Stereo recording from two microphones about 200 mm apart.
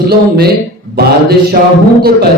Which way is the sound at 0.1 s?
50° right (ahead or behind).